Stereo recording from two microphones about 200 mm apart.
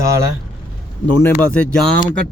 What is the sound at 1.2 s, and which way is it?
Speech, 5° left (ahead or behind).